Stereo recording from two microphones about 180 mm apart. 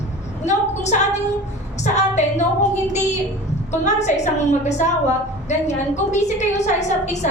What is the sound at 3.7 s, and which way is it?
A woman's voice, 40° left (ahead or behind).